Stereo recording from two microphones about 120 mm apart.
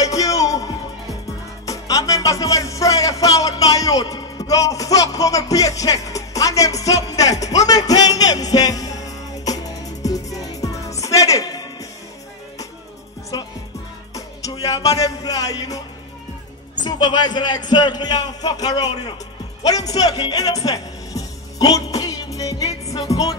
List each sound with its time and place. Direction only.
0.0 s music: 30° left (ahead or behind)
1.7 s music: 30° left (ahead or behind)
14.1 s music: 30° left (ahead or behind)
16.8 s a man's voice: 40° left (ahead or behind)
19.6 s music: 30° left (ahead or behind)